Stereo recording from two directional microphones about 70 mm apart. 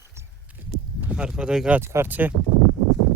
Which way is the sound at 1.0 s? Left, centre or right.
Centre.